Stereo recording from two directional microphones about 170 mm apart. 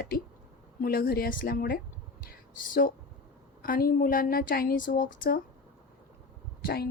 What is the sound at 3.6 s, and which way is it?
Speech, 60° left (ahead or behind).